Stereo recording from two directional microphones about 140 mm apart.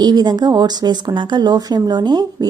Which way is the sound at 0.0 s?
30° right (ahead or behind).